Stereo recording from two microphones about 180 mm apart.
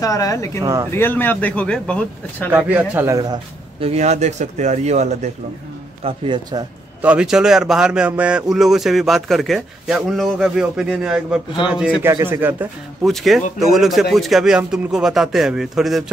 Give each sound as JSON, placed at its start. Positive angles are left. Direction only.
{"t": 0.0, "sound": "speech", "side_deg": 20}
{"t": 0.6, "sound": "a man's voice", "side_deg": -15}
{"t": 0.9, "sound": "a man's voice", "side_deg": 10}
{"t": 2.5, "sound": "a man's voice", "side_deg": -10}
{"t": 3.8, "sound": "a man's voice", "side_deg": -35}
{"t": 6.0, "sound": "a man's voice", "side_deg": -25}
{"t": 7.0, "sound": "a man's voice", "side_deg": -5}
{"t": 13.0, "sound": "speech", "side_deg": 0}